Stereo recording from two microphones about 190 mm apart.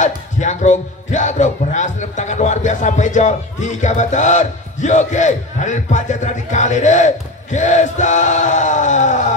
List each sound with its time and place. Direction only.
0.0 s a man's voice: 40° left (ahead or behind)